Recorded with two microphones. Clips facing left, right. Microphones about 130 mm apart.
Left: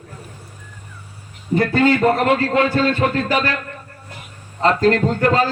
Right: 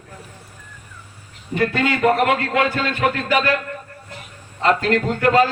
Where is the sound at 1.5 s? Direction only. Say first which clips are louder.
Left 4 dB; 35° left (ahead or behind).